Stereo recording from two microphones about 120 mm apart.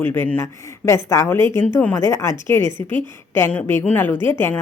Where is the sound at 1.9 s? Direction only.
25° left (ahead or behind).